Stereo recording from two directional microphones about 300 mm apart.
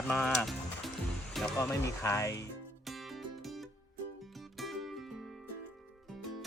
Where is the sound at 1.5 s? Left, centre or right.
Centre.